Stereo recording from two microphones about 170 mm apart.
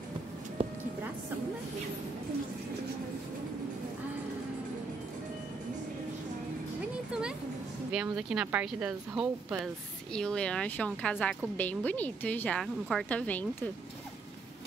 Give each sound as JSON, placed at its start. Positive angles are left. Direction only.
{"t": 0.6, "sound": "a sound", "side_deg": -35}
{"t": 7.9, "sound": "speech", "side_deg": -5}
{"t": 10.1, "sound": "a woman's voice", "side_deg": 5}